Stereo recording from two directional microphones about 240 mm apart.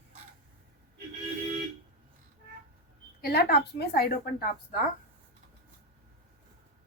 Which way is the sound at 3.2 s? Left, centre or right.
Left.